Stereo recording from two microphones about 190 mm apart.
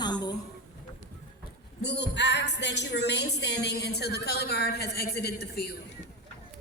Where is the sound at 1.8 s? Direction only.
65° left (ahead or behind).